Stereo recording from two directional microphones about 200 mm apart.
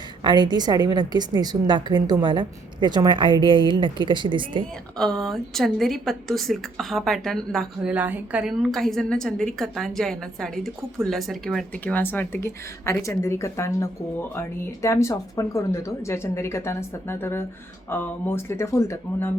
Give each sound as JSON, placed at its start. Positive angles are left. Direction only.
{"t": 0.2, "sound": "a woman's voice", "side_deg": -20}
{"t": 4.9, "sound": "a woman's voice", "side_deg": 0}